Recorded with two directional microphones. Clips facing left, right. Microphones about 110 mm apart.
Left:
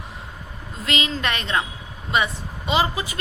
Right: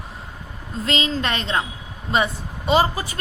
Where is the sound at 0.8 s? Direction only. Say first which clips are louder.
Right 2 dB; 35° right (ahead or behind).